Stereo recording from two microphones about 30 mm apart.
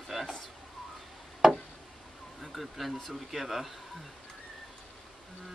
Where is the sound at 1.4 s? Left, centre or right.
Centre.